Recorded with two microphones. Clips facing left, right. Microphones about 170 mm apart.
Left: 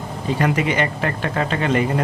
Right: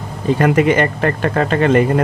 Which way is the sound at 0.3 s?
50° right (ahead or behind).